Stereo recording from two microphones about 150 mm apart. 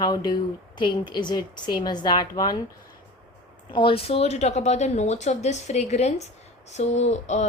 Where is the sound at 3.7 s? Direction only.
35° left (ahead or behind).